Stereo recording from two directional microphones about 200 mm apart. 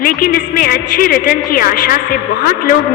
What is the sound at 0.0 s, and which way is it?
A man's voice, 45° left (ahead or behind).